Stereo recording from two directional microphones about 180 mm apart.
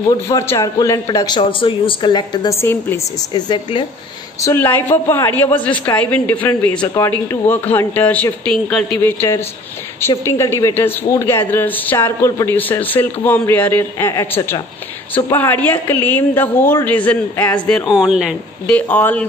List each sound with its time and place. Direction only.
0.3 s speech: 15° left (ahead or behind)
2.6 s a man's voice: 10° left (ahead or behind)
3.3 s speech: 25° left (ahead or behind)
4.4 s a man's voice: 15° left (ahead or behind)
18.7 s a man's voice: 10° left (ahead or behind)